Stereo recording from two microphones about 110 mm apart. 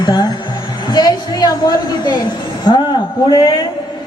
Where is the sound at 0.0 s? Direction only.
40° left (ahead or behind).